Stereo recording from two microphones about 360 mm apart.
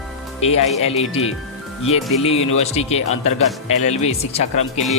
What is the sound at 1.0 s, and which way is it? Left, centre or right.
Speech, left.